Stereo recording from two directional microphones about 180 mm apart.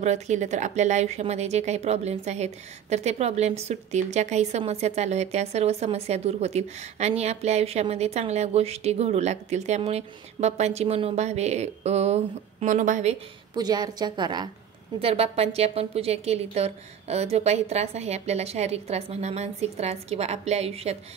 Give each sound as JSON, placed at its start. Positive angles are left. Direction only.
{"t": 0.0, "sound": "speech", "side_deg": -40}
{"t": 13.6, "sound": "a woman's voice", "side_deg": -20}